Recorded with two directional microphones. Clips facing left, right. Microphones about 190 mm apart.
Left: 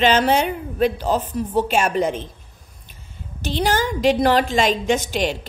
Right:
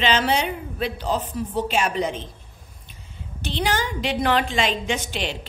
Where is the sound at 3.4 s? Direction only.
45° left (ahead or behind).